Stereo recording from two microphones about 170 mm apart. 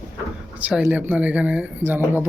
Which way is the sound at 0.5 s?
10° right (ahead or behind).